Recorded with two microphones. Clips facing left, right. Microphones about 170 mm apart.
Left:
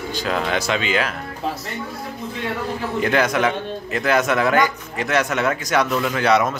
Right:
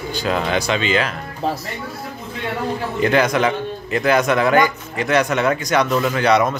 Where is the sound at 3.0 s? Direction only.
Centre (ahead or behind).